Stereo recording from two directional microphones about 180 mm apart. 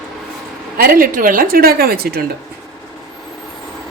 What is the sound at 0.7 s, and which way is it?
A woman's voice, 55° right (ahead or behind).